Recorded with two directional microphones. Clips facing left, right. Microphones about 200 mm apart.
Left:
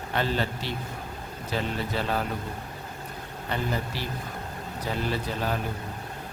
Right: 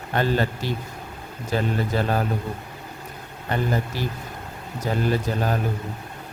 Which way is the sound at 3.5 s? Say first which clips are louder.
Right 5 dB; 50° right (ahead or behind).